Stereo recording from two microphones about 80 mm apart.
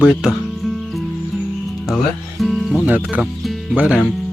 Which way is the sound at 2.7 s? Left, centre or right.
Right.